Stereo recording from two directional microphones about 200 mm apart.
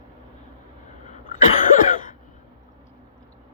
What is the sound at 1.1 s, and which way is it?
Cough, 40° left (ahead or behind).